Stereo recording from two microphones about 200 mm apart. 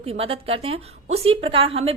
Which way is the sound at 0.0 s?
30° right (ahead or behind).